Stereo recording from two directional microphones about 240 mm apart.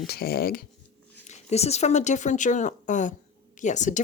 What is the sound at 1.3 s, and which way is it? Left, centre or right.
Speech, left.